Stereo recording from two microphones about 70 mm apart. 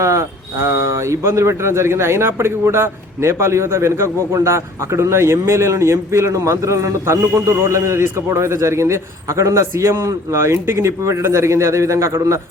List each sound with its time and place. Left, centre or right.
0.0 s speech: right